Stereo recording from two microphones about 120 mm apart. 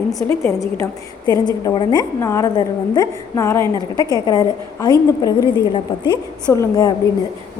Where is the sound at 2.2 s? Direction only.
25° left (ahead or behind).